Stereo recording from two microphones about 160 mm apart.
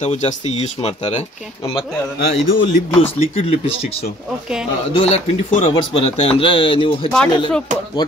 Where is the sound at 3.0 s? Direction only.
40° left (ahead or behind).